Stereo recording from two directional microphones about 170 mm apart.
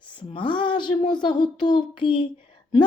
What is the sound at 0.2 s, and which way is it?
A woman's voice, 30° left (ahead or behind).